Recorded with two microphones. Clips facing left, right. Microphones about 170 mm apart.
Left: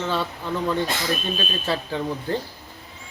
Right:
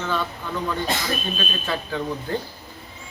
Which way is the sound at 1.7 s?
30° left (ahead or behind).